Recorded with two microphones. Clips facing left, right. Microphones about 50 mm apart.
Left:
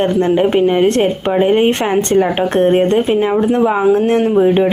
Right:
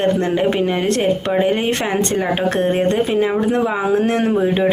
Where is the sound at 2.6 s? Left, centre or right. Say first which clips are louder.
Left 7 dB; centre.